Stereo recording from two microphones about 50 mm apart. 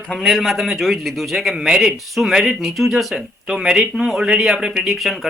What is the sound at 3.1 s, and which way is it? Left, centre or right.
Speech, centre.